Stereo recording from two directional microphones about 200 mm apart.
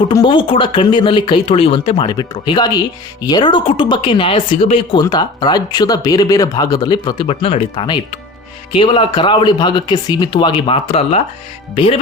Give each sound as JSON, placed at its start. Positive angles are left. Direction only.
{"t": 0.1, "sound": "speech", "side_deg": 20}